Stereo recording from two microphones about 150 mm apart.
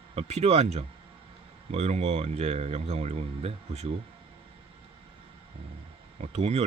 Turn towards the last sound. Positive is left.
turn(degrees=-45)  # may be behind; listen again after turning